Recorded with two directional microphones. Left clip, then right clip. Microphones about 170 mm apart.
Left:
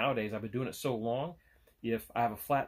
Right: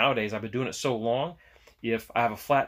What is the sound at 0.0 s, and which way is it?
Speech, 15° right (ahead or behind).